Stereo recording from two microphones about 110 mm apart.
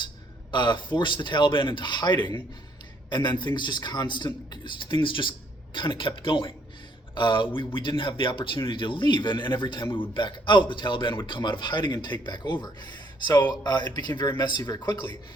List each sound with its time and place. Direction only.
0.5 s a man's voice: 45° left (ahead or behind)